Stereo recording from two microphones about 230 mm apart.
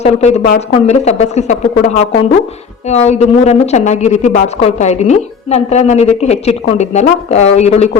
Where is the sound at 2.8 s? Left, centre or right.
Left.